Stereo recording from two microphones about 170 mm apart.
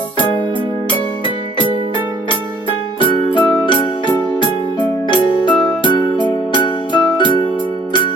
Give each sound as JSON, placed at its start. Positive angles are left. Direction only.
{"t": 0.9, "sound": "music", "side_deg": 30}
{"t": 3.0, "sound": "electric piano", "side_deg": 30}
{"t": 5.0, "sound": "keyboard", "side_deg": 30}
{"t": 6.2, "sound": "music", "side_deg": 30}